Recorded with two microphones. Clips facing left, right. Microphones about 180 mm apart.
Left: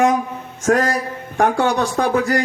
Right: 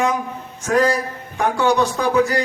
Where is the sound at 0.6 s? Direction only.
45° left (ahead or behind).